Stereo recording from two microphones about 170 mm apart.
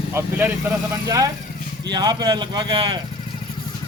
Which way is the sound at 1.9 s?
25° right (ahead or behind).